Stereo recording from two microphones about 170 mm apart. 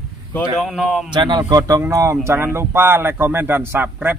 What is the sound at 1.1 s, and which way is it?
Speech, 25° right (ahead or behind).